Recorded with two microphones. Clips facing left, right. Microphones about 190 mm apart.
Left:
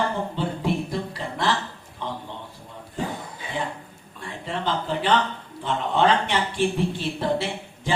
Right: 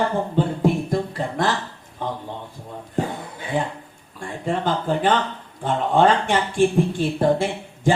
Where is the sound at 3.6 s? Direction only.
50° right (ahead or behind).